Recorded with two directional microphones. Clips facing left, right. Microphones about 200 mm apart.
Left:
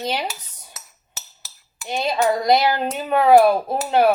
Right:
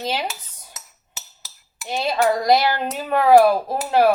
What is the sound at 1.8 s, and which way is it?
Speech, 5° right (ahead or behind).